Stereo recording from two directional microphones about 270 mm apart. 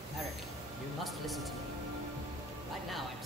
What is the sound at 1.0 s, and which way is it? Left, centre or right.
Speech, centre.